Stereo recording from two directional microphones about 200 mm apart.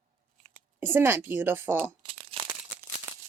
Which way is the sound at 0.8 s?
10° right (ahead or behind).